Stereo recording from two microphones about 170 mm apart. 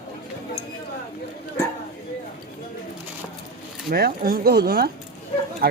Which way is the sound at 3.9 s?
60° right (ahead or behind).